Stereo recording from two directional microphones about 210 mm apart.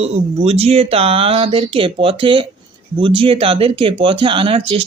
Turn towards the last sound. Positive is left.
turn(degrees=-25)  # may be behind; listen again after turning